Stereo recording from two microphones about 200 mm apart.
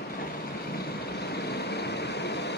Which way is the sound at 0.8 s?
55° left (ahead or behind).